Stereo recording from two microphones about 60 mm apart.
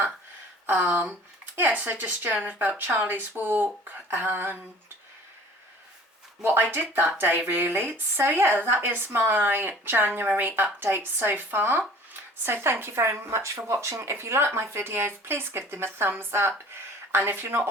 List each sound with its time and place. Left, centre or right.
0.7 s speech: right
6.4 s speech: right